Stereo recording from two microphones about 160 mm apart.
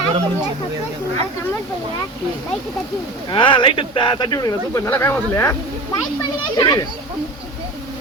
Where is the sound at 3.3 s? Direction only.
30° left (ahead or behind).